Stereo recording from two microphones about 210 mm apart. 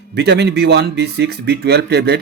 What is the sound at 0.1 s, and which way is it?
Speech, 50° right (ahead or behind).